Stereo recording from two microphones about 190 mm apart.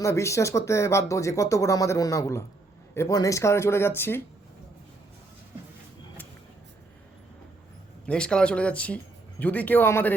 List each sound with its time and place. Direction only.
0.0 s speech: 15° left (ahead or behind)
8.0 s speech: 5° left (ahead or behind)